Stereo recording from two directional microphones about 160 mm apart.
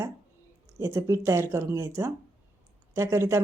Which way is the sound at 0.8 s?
15° right (ahead or behind).